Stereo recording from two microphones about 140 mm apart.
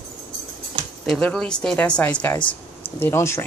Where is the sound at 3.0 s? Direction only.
20° left (ahead or behind).